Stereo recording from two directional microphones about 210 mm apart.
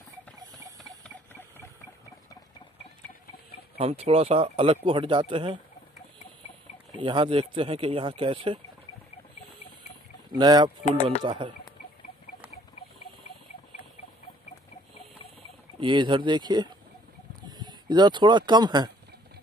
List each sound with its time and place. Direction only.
0.4 s a sound: 15° right (ahead or behind)
1.0 s a sound: 10° left (ahead or behind)
3.7 s speech: 30° right (ahead or behind)
7.0 s speech: 25° right (ahead or behind)
10.3 s speech: 20° right (ahead or behind)
15.8 s speech: 20° right (ahead or behind)